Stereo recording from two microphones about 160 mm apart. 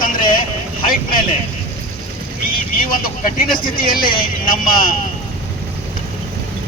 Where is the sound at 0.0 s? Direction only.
60° left (ahead or behind).